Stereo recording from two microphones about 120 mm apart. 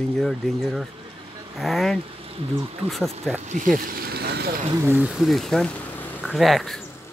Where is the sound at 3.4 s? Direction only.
90° right.